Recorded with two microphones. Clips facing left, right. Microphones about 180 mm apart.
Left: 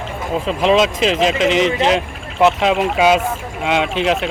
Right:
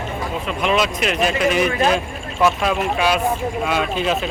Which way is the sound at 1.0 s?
90° left.